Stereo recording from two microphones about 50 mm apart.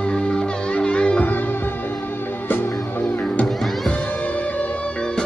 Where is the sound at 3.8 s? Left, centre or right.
Left.